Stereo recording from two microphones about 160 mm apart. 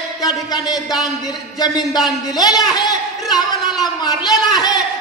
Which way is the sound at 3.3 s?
25° left (ahead or behind).